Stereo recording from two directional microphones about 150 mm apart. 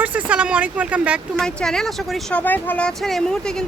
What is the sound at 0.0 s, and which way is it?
Speech, 10° right (ahead or behind).